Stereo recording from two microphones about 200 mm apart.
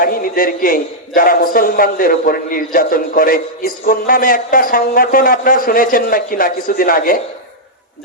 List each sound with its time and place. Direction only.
0.0 s a man's voice: 45° left (ahead or behind)